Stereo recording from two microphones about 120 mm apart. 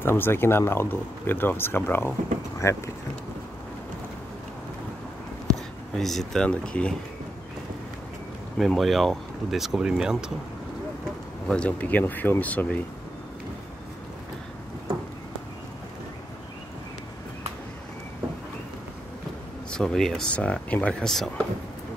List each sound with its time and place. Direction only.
0.0 s speech: 20° left (ahead or behind)
5.5 s speech: centre (ahead or behind)
8.5 s speech: centre (ahead or behind)
11.4 s speech: 10° left (ahead or behind)
19.7 s speech: 5° left (ahead or behind)